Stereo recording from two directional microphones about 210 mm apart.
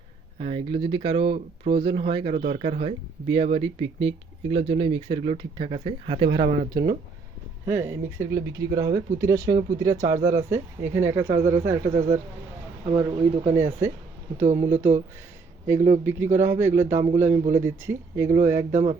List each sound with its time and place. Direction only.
0.3 s speech: 25° right (ahead or behind)
12.8 s speech: 25° right (ahead or behind)
13.5 s speech: 10° right (ahead or behind)
18.7 s speech: 35° right (ahead or behind)